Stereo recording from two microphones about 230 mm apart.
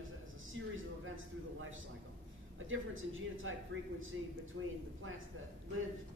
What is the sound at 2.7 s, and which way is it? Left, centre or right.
A man's voice, right.